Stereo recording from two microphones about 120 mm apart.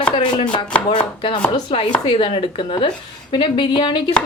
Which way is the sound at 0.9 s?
40° left (ahead or behind).